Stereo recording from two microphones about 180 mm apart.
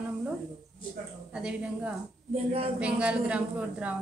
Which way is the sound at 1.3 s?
5° right (ahead or behind).